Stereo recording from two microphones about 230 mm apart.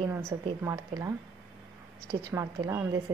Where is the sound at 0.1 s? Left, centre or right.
Centre.